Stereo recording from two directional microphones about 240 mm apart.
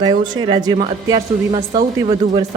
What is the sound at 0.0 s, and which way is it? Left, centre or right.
Speech, centre.